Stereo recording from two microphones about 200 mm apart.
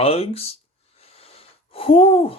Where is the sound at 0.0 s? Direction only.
30° left (ahead or behind).